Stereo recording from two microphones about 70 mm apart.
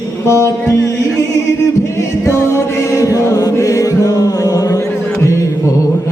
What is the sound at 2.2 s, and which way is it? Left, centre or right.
Chant, left.